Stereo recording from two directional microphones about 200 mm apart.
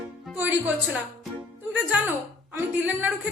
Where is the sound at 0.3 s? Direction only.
10° right (ahead or behind).